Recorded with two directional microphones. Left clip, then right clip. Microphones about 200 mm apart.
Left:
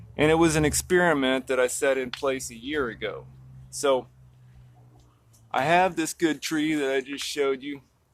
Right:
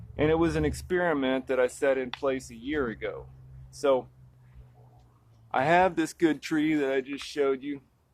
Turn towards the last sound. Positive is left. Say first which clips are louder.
# left 1 dB
turn(degrees=5)  # may be behind; listen again after turning